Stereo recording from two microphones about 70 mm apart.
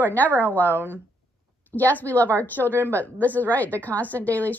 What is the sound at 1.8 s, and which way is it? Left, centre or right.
A woman's voice, left.